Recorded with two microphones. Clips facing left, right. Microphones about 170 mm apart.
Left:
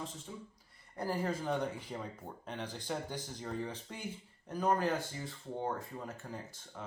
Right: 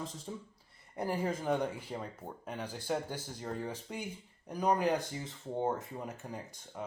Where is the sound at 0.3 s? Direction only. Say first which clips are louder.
Right 4 dB; 35° right (ahead or behind).